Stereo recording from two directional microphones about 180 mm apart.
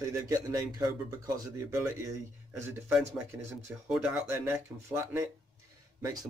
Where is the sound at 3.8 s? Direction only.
5° right (ahead or behind).